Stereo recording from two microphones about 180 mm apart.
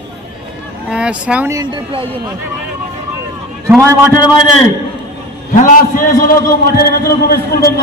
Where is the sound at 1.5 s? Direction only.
25° right (ahead or behind).